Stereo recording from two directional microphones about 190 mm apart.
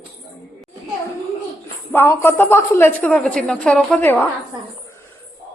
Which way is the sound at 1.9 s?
10° left (ahead or behind).